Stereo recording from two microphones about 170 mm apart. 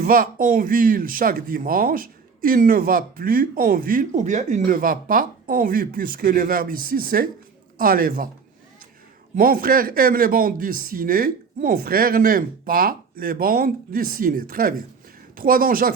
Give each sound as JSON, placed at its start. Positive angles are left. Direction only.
{"t": 0.0, "sound": "speech", "side_deg": -55}
{"t": 9.3, "sound": "speech", "side_deg": -55}